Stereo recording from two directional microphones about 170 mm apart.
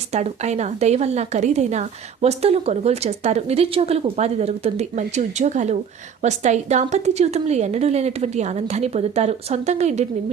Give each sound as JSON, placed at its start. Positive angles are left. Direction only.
{"t": 0.1, "sound": "a woman's voice", "side_deg": -40}